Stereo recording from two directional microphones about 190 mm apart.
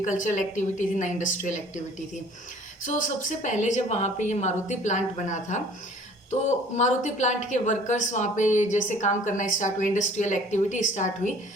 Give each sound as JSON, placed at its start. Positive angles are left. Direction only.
{"t": 0.0, "sound": "speech", "side_deg": 40}
{"t": 6.7, "sound": "speech", "side_deg": 40}